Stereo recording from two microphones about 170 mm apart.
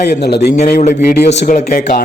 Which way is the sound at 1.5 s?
50° left (ahead or behind).